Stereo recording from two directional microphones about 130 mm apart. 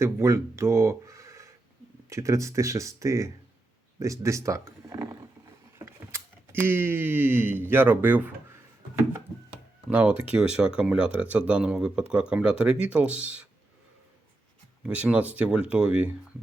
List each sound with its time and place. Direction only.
0.0 s speech: 20° right (ahead or behind)
9.9 s speech: 10° right (ahead or behind)
14.8 s speech: 10° right (ahead or behind)